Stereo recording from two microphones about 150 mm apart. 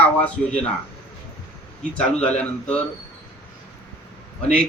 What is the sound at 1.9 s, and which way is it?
Speech, 10° left (ahead or behind).